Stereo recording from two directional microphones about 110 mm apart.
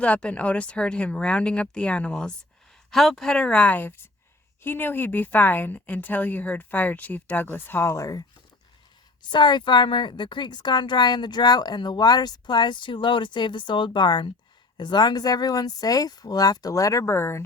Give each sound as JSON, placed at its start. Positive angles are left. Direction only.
{"t": 0.0, "sound": "a woman's voice", "side_deg": 10}
{"t": 9.3, "sound": "speech", "side_deg": 45}